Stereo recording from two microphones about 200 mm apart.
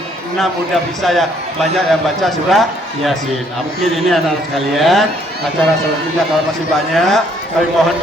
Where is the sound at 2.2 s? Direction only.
Centre (ahead or behind).